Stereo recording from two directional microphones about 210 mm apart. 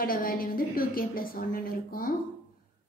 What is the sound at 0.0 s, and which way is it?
A woman's voice, 45° left (ahead or behind).